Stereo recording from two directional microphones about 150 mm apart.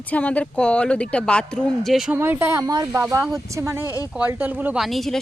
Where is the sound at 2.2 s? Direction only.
15° right (ahead or behind).